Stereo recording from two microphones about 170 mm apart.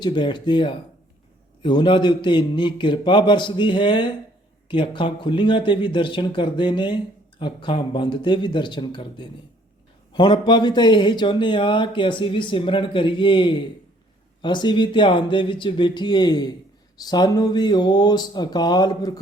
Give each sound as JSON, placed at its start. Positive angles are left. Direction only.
{"t": 0.0, "sound": "speech", "side_deg": 25}